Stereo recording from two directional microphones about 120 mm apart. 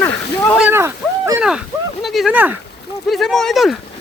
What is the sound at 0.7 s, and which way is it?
Speech, 20° right (ahead or behind).